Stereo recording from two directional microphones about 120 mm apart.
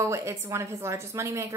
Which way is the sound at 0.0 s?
25° right (ahead or behind).